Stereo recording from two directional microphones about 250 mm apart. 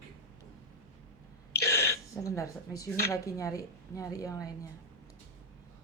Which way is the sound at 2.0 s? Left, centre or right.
Centre.